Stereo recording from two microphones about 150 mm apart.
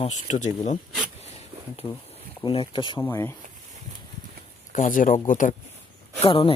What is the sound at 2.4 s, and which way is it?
Speech, 35° left (ahead or behind).